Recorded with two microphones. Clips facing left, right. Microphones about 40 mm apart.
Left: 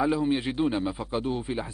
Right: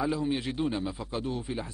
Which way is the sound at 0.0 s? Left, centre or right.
Left.